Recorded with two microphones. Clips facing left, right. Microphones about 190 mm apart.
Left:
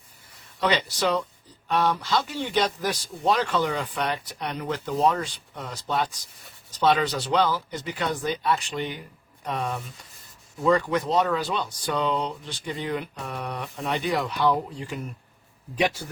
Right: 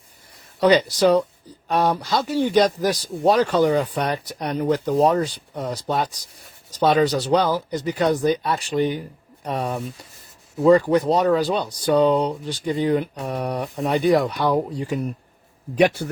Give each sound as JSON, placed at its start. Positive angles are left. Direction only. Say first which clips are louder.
{"t": 0.6, "sound": "speech", "louder": "right 8 dB", "side_deg": -40}
{"t": 15.7, "sound": "speech", "louder": "right 7 dB", "side_deg": -60}